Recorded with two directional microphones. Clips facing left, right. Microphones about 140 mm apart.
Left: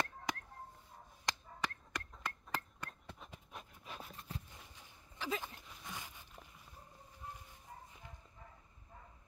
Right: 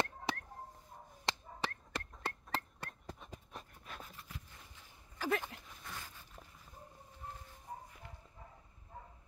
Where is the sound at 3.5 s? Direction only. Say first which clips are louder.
Left 1 dB; 15° left (ahead or behind).